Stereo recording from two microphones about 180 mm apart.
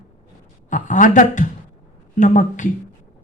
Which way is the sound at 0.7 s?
45° left (ahead or behind).